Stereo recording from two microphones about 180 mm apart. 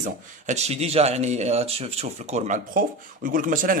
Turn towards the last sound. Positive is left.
turn(degrees=-50)  # may be behind; listen again after turning